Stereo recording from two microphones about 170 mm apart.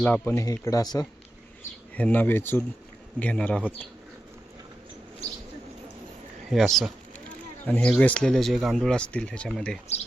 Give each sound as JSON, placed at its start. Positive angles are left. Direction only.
{"t": 0.0, "sound": "speech", "side_deg": 10}
{"t": 2.0, "sound": "speech", "side_deg": 10}
{"t": 6.5, "sound": "speech", "side_deg": 0}